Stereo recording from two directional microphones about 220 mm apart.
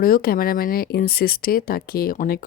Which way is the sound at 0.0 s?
40° left (ahead or behind).